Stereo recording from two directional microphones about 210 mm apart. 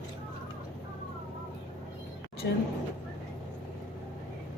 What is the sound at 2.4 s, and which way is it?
Speech, 50° left (ahead or behind).